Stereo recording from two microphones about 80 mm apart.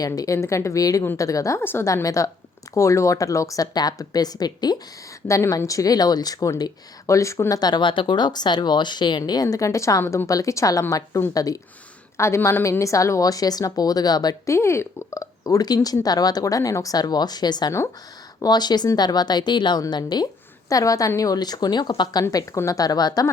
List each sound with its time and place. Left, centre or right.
0.0 s speech: left
0.3 s a woman's voice: left
1.6 s a woman's voice: left
1.9 s speech: left
5.3 s speech: left
7.1 s a woman's voice: left
7.6 s speech: left
12.1 s a woman's voice: left
12.8 s speech: left
14.4 s speech: left
20.7 s speech: left